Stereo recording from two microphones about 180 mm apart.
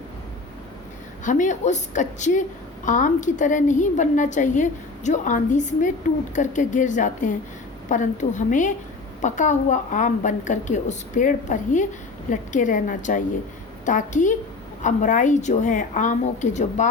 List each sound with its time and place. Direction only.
1.2 s a woman's voice: 45° left (ahead or behind)